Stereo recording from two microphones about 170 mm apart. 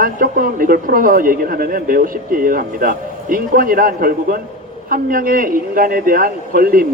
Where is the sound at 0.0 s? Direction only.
55° right (ahead or behind).